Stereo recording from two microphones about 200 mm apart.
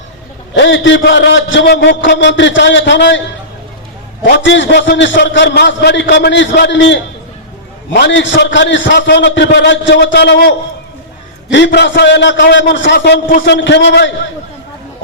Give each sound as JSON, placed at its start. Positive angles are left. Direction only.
{"t": 0.5, "sound": "a man's voice", "side_deg": 65}
{"t": 4.2, "sound": "a man's voice", "side_deg": 65}
{"t": 11.5, "sound": "a man's voice", "side_deg": 60}